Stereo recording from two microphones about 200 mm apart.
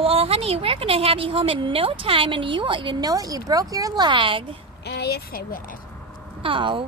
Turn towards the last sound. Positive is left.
turn(degrees=-25)  # may be behind; listen again after turning